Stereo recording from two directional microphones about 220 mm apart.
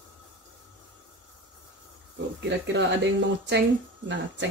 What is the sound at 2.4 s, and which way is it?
Speech, 50° right (ahead or behind).